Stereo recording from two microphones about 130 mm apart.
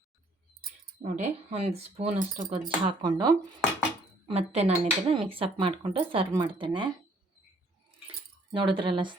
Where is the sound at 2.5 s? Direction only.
35° right (ahead or behind).